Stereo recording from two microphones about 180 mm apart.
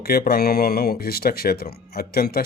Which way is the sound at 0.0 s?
60° left (ahead or behind).